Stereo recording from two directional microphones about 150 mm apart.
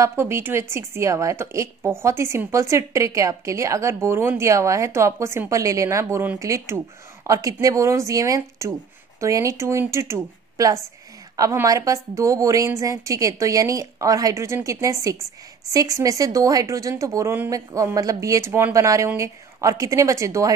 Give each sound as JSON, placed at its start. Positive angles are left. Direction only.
{"t": 0.0, "sound": "a woman's voice", "side_deg": -15}